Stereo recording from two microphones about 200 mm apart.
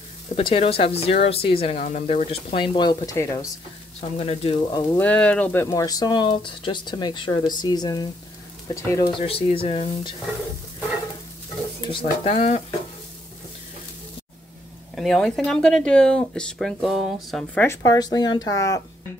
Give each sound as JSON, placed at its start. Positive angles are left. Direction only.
{"t": 0.4, "sound": "speech", "side_deg": 25}
{"t": 4.0, "sound": "speech", "side_deg": 30}
{"t": 4.7, "sound": "speech", "side_deg": 10}
{"t": 11.9, "sound": "speech", "side_deg": 25}
{"t": 12.4, "sound": "stir", "side_deg": 35}
{"t": 15.0, "sound": "speech", "side_deg": 0}
{"t": 17.6, "sound": "speech", "side_deg": 15}